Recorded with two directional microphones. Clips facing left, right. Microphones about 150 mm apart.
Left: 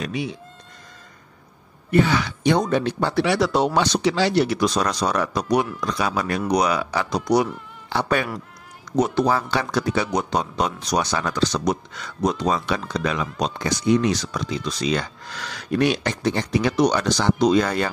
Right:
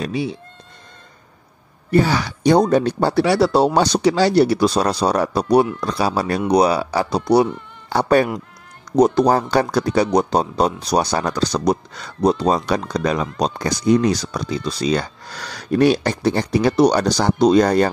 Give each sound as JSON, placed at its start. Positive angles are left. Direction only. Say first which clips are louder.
{"t": 0.0, "sound": "speech", "louder": "right 4 dB", "side_deg": -30}
{"t": 1.9, "sound": "speech", "louder": "right 2 dB", "side_deg": -35}